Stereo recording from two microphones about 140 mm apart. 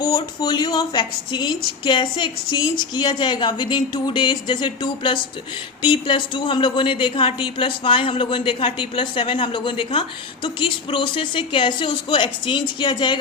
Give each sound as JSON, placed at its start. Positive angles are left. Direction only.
{"t": 0.1, "sound": "a woman's voice", "side_deg": 30}